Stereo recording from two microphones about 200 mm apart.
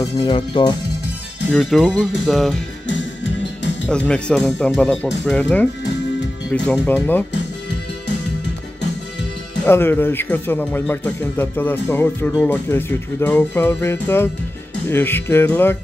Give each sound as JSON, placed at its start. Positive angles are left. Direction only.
{"t": 0.0, "sound": "speech", "side_deg": 20}
{"t": 1.5, "sound": "speech", "side_deg": 5}
{"t": 2.9, "sound": "music", "side_deg": 65}
{"t": 3.9, "sound": "speech", "side_deg": 5}
{"t": 9.7, "sound": "speech", "side_deg": 10}